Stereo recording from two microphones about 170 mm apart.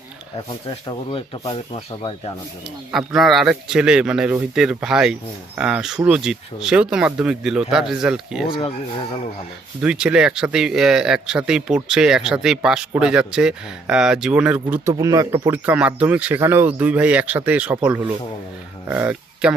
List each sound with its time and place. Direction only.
0.7 s speech: 30° left (ahead or behind)
2.6 s speech: centre (ahead or behind)
8.4 s speech: 25° left (ahead or behind)
9.8 s speech: 5° right (ahead or behind)
14.9 s speech: 20° right (ahead or behind)
15.4 s speech: 10° right (ahead or behind)